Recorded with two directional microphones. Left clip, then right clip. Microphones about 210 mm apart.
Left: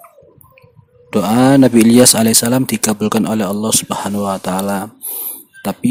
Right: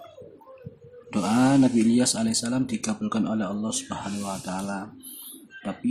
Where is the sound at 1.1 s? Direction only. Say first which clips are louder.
Left 10 dB; 45° left (ahead or behind).